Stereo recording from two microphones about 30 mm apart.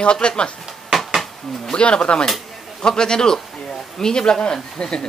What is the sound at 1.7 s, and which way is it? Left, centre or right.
Speech, left.